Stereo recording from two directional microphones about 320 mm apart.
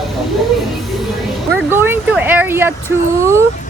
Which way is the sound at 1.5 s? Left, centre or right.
Centre.